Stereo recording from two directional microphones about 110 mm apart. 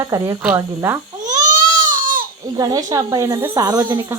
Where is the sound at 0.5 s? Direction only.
25° right (ahead or behind).